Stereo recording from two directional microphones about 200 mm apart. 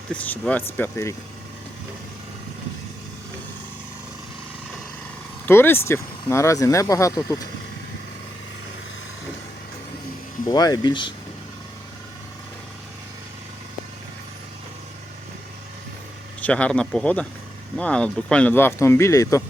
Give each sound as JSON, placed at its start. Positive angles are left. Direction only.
{"t": 0.1, "sound": "speech", "side_deg": 5}
{"t": 5.5, "sound": "speech", "side_deg": 10}
{"t": 10.4, "sound": "speech", "side_deg": 20}
{"t": 16.4, "sound": "speech", "side_deg": 5}